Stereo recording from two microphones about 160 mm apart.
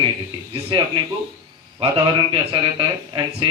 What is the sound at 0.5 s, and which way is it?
Speech, 30° right (ahead or behind).